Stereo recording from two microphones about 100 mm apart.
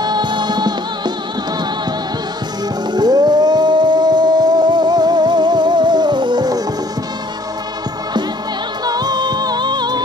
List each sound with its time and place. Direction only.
0.0 s music: 45° right (ahead or behind)
2.9 s music: 45° right (ahead or behind)
8.8 s music: 40° right (ahead or behind)